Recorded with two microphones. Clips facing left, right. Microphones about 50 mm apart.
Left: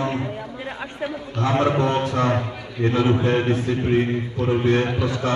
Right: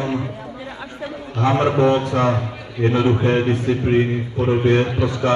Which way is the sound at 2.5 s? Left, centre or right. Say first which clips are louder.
Right 1 dB; centre.